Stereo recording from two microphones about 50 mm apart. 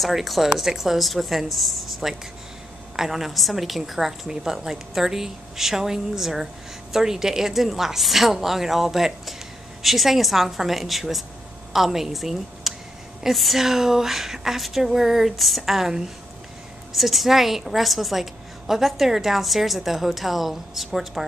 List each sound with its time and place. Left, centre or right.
0.0 s a woman's voice: centre